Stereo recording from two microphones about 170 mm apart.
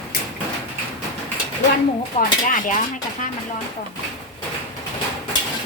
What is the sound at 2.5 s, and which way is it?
Speech, 50° left (ahead or behind).